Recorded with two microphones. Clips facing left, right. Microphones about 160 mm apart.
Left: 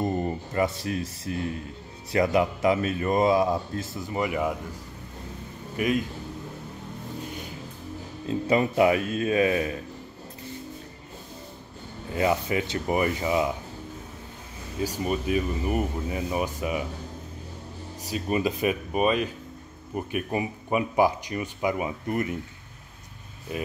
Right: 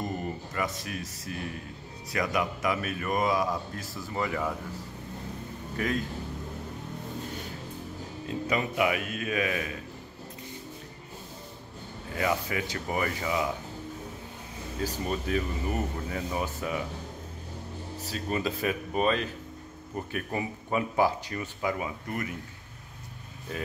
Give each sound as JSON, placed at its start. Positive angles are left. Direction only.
{"t": 0.0, "sound": "speech", "side_deg": 30}
{"t": 5.8, "sound": "speech", "side_deg": 15}
{"t": 8.3, "sound": "speech", "side_deg": 30}
{"t": 12.2, "sound": "speech", "side_deg": 25}
{"t": 14.8, "sound": "speech", "side_deg": 10}
{"t": 18.0, "sound": "speech", "side_deg": 15}
{"t": 23.5, "sound": "speech", "side_deg": 15}